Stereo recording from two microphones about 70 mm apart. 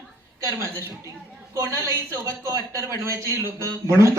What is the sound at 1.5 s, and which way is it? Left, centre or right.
Speech, right.